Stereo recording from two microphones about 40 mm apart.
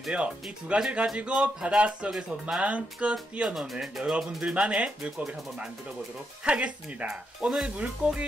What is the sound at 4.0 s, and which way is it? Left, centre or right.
Speech, centre.